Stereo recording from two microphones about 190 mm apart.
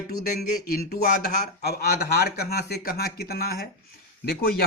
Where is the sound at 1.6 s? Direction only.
60° left (ahead or behind).